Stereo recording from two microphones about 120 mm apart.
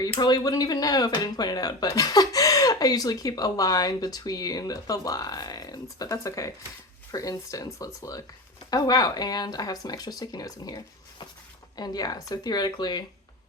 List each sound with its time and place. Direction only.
0.2 s speech: 35° left (ahead or behind)